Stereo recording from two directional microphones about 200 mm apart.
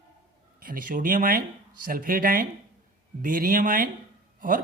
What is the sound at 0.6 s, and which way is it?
Speech, 45° right (ahead or behind).